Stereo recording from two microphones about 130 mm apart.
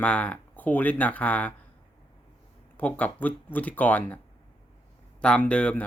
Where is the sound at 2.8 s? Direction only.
10° left (ahead or behind).